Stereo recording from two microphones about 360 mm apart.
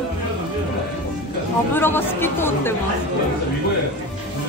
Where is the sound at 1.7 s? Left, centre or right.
Centre.